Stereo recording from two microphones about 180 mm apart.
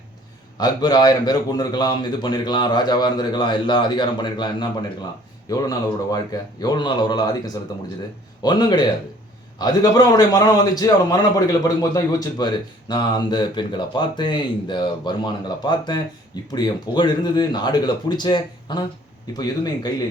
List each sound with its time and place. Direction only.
0.6 s a man's voice: 25° left (ahead or behind)